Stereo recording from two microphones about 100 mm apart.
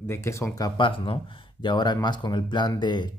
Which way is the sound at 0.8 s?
55° left (ahead or behind).